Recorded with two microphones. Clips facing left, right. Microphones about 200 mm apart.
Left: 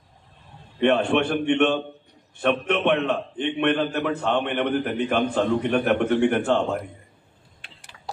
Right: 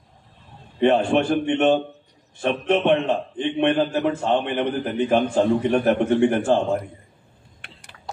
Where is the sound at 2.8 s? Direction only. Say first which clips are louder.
Right 2 dB; 60° left (ahead or behind).